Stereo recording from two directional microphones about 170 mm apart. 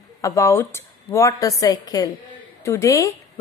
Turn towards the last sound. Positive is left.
turn(degrees=20)  # may be behind; listen again after turning